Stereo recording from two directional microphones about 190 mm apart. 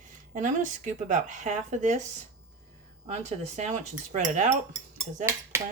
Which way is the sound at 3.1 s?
35° right (ahead or behind).